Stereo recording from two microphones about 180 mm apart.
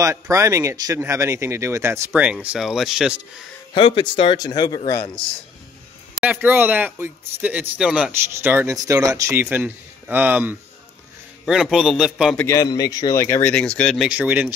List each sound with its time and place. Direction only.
0.0 s speech: 15° right (ahead or behind)
3.7 s speech: 30° left (ahead or behind)
6.2 s a man's voice: 10° right (ahead or behind)
12.4 s speech: 15° left (ahead or behind)
14.0 s speech: 5° right (ahead or behind)